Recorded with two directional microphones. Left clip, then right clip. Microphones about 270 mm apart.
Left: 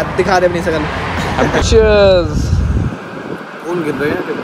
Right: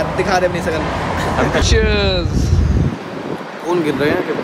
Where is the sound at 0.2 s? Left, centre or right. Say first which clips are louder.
Left 5 dB; centre.